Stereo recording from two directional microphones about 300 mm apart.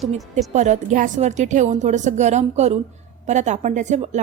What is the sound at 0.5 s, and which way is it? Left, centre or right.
A woman's voice, right.